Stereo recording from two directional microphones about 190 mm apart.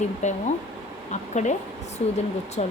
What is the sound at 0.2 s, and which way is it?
Speech, 35° left (ahead or behind).